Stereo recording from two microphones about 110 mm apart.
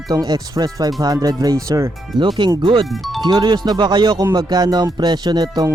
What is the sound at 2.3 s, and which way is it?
Speech, 45° right (ahead or behind).